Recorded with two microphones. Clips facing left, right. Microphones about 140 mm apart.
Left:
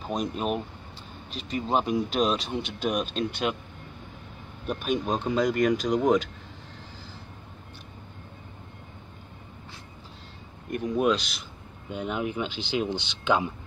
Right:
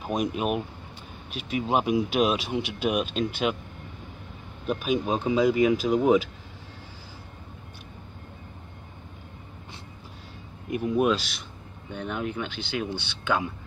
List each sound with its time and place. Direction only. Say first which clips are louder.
0.0 s speech: right 2 dB; 10° right (ahead or behind)
4.6 s speech: right 2 dB; 5° right (ahead or behind)
10.7 s speech: right 1 dB; 5° right (ahead or behind)
11.9 s speech: left 1 dB; 15° left (ahead or behind)